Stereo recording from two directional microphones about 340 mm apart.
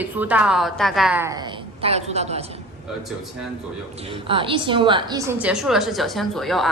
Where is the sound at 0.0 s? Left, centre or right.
Centre.